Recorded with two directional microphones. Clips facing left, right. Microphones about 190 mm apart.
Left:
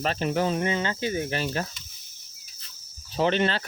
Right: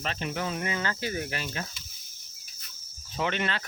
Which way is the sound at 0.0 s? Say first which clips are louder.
Left 7 dB; 40° left (ahead or behind).